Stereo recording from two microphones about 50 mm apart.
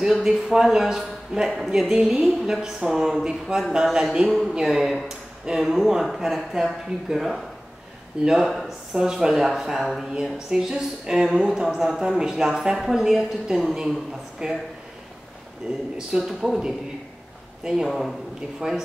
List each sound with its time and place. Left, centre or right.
0.0 s speech: centre
15.7 s speech: right
17.8 s speech: centre
18.6 s speech: centre